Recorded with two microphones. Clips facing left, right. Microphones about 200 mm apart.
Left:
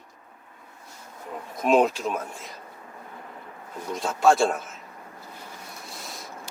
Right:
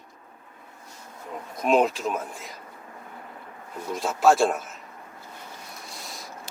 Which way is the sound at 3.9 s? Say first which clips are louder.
Even; centre (ahead or behind).